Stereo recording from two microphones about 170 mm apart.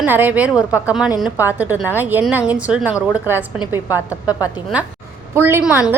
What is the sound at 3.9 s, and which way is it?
Speech, 20° left (ahead or behind).